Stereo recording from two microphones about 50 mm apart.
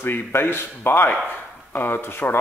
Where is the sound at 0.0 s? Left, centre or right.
Left.